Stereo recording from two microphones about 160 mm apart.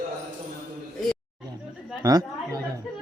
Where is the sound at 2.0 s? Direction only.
25° right (ahead or behind).